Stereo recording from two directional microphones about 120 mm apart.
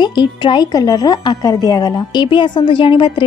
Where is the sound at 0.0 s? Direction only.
40° left (ahead or behind).